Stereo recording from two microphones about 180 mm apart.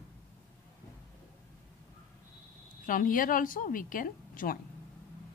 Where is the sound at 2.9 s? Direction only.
50° left (ahead or behind).